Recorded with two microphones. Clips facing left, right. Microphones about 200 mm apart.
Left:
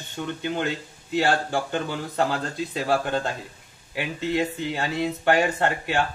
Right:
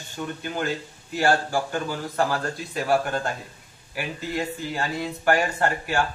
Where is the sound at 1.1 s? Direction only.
20° left (ahead or behind).